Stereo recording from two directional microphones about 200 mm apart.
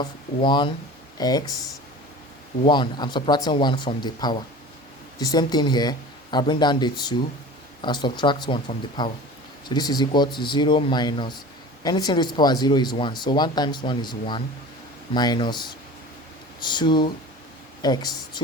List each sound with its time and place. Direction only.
0.0 s speech: 25° left (ahead or behind)
2.6 s speech: 20° left (ahead or behind)
16.6 s speech: 25° left (ahead or behind)